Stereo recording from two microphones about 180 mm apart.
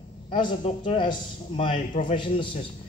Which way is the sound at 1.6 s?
45° left (ahead or behind).